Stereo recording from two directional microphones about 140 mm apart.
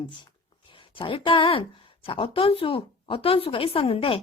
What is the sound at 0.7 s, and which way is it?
A woman's voice, 40° left (ahead or behind).